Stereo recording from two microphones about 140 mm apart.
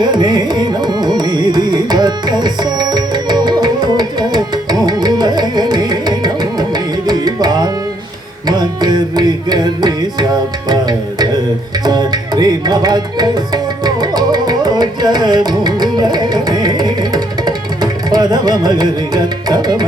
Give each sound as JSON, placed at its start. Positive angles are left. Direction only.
{"t": 0.0, "sound": "carnatic music", "side_deg": -30}
{"t": 8.4, "sound": "music", "side_deg": -30}
{"t": 11.9, "sound": "tabla", "side_deg": -30}